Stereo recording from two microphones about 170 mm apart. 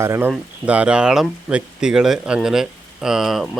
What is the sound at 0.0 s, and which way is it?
Speech, 15° right (ahead or behind).